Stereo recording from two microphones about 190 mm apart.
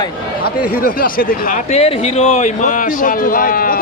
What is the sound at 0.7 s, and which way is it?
Speech, 50° left (ahead or behind).